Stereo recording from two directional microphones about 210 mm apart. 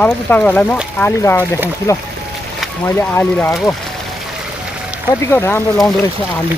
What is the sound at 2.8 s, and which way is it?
Speech, 10° left (ahead or behind).